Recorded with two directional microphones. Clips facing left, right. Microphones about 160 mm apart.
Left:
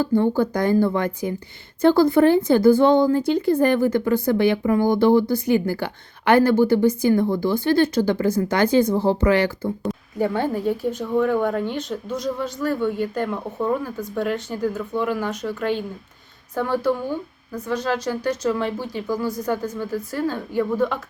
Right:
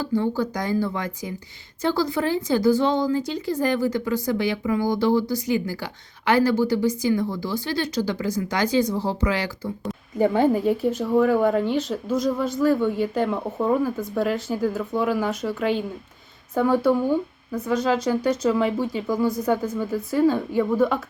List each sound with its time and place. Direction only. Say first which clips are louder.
0.0 s a woman's voice: left 4 dB; 55° left (ahead or behind)
9.8 s speech: right 4 dB; 5° right (ahead or behind)